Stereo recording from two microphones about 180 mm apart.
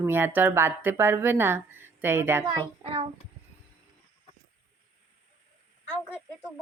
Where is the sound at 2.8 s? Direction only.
30° right (ahead or behind).